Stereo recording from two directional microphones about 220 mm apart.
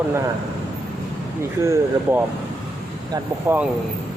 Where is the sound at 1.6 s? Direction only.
15° right (ahead or behind).